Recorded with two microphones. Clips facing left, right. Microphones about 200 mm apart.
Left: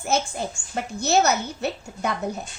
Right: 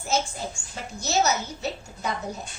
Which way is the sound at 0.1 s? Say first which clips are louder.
Left 2 dB; 60° left (ahead or behind).